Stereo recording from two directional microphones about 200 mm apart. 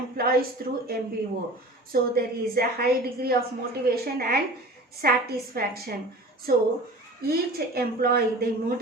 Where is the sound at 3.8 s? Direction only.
50° right (ahead or behind).